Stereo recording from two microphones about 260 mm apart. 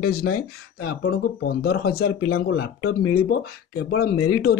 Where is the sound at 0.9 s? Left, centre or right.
Left.